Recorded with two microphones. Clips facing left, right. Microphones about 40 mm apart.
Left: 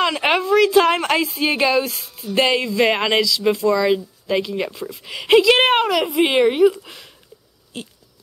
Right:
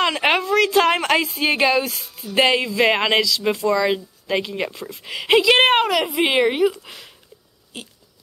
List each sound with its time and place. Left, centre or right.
0.0 s a woman's voice: centre